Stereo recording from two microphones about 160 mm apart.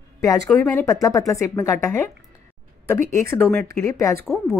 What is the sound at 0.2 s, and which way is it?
A woman's voice, 20° left (ahead or behind).